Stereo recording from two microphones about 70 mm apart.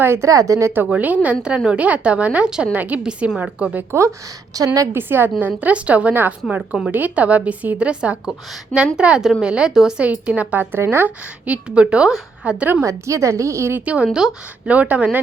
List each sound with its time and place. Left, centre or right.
0.0 s a woman's voice: right
0.3 s a woman's voice: right
0.9 s a woman's voice: right
4.5 s a woman's voice: right
4.9 s a woman's voice: right
5.4 s a woman's voice: right
10.0 s a woman's voice: centre
12.8 s a woman's voice: right
13.7 s a woman's voice: centre
14.7 s a woman's voice: right